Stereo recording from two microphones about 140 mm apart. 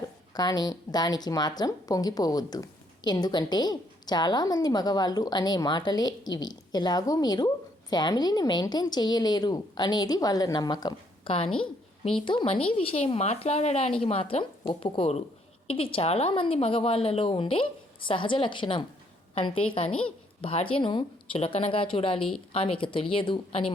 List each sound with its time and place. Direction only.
0.3 s speech: 30° left (ahead or behind)
11.5 s a sound: 40° left (ahead or behind)
12.2 s a woman's voice: 35° left (ahead or behind)